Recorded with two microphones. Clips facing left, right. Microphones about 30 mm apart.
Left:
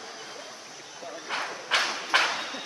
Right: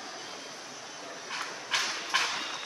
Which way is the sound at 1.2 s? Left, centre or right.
Left.